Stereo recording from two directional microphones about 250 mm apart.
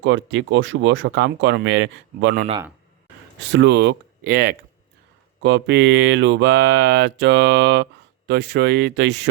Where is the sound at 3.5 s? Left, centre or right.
Right.